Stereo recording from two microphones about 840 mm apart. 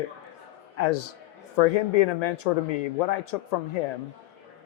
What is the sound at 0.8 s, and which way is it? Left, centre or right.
Speech, left.